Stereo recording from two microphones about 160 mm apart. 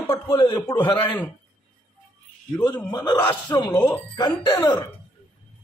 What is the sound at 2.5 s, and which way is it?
A man's voice, 25° left (ahead or behind).